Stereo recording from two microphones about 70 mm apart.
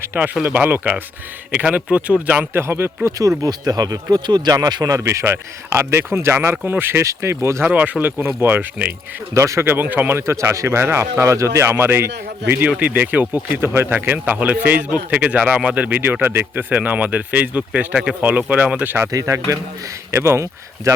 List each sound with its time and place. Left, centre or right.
0.1 s speech: right
2.5 s a man's voice: right
3.2 s speech: right
7.0 s a man's voice: right
7.6 s speech: centre
9.3 s a man's voice: right
19.1 s speech: right
20.1 s speech: right